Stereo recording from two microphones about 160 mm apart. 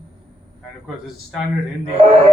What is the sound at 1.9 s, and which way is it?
Speech, 40° right (ahead or behind).